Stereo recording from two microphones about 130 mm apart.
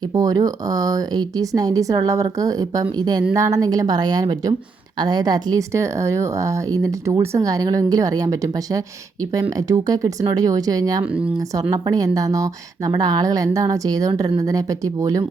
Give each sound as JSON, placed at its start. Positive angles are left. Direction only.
{"t": 0.1, "sound": "speech", "side_deg": -30}